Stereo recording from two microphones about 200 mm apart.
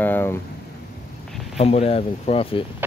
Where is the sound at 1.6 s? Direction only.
30° left (ahead or behind).